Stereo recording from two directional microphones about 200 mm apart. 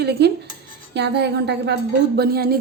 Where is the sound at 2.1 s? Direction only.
50° right (ahead or behind).